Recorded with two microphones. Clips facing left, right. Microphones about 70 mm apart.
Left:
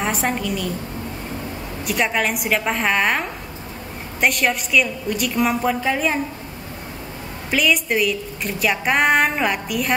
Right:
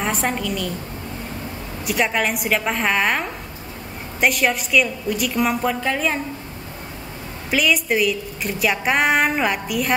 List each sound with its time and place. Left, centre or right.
0.0 s a woman's voice: centre
1.9 s a woman's voice: centre
7.5 s a woman's voice: centre